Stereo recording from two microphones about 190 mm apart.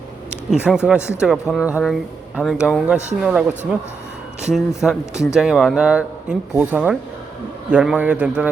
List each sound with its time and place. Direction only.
0.5 s speech: 5° right (ahead or behind)
4.5 s a man's voice: centre (ahead or behind)